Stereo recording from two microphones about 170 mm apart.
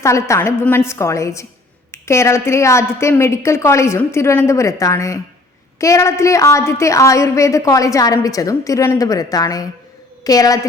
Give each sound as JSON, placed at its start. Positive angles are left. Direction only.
{"t": 0.0, "sound": "a woman's voice", "side_deg": 15}